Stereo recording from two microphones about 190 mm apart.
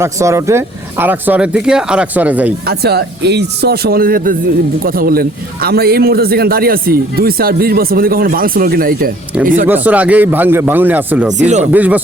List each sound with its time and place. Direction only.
0.0 s speech: 15° right (ahead or behind)
2.6 s a man's voice: 55° right (ahead or behind)
9.6 s speech: 10° right (ahead or behind)
11.3 s speech: 40° right (ahead or behind)
11.6 s speech: 10° right (ahead or behind)